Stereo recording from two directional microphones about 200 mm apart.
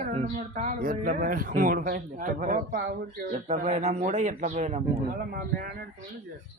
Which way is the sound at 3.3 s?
35° right (ahead or behind).